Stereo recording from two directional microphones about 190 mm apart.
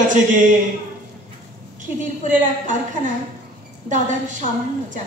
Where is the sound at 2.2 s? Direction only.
40° right (ahead or behind).